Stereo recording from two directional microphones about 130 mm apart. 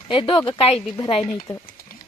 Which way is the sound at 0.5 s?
50° left (ahead or behind).